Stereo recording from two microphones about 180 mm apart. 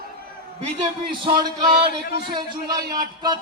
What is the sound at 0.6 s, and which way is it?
Speech, 30° right (ahead or behind).